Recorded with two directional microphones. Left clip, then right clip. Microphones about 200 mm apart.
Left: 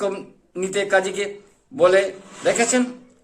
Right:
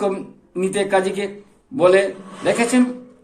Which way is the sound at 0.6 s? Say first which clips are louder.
Right 1 dB; 15° left (ahead or behind).